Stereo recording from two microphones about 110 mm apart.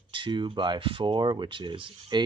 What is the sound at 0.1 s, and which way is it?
Speech, 45° right (ahead or behind).